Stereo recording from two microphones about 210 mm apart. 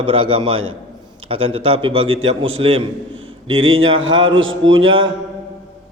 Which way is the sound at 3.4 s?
75° right (ahead or behind).